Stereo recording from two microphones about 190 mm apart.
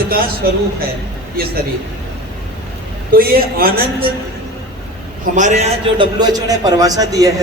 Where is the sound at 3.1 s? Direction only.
50° right (ahead or behind).